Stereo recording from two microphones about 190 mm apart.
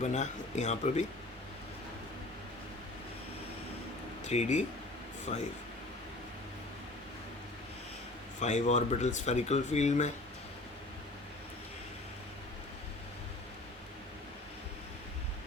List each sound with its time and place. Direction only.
0.0 s speech: 35° left (ahead or behind)
4.2 s speech: 35° left (ahead or behind)
8.4 s speech: 40° left (ahead or behind)